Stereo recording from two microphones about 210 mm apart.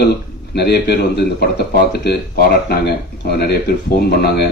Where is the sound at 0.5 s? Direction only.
50° left (ahead or behind).